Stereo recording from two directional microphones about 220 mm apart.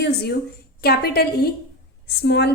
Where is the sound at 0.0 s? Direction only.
45° left (ahead or behind).